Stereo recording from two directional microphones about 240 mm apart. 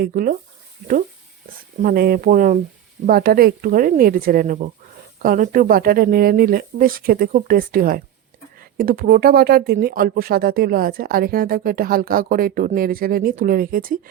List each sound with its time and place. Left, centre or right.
0.0 s speech: right
1.8 s speech: right